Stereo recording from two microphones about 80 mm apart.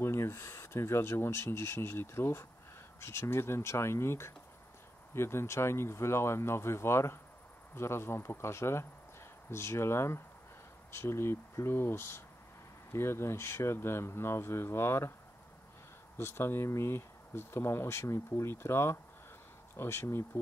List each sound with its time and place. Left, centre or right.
0.0 s speech: left
16.2 s speech: left